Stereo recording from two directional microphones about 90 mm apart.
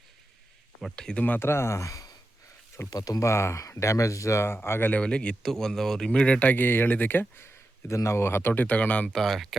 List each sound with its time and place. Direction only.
0.9 s speech: 10° left (ahead or behind)
9.0 s speech: centre (ahead or behind)